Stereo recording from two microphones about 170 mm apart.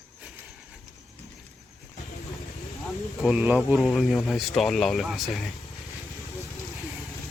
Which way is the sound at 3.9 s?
5° left (ahead or behind).